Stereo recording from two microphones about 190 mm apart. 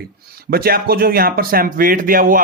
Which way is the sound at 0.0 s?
55° right (ahead or behind).